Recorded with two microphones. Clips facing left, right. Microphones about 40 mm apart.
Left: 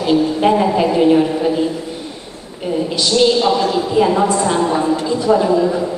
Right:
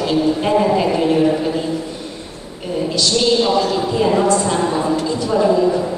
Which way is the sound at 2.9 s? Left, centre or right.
Centre.